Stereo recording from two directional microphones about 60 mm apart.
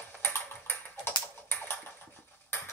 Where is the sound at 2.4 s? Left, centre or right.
Left.